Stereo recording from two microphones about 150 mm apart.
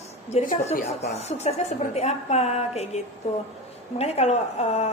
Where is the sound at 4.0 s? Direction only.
45° left (ahead or behind).